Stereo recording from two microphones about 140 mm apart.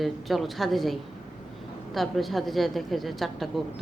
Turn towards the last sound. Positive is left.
turn(degrees=0)  # may be behind; listen again after turning